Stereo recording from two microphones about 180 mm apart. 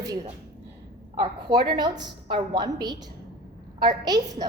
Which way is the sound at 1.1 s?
25° right (ahead or behind).